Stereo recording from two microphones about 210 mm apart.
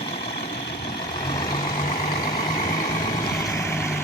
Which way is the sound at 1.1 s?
20° left (ahead or behind).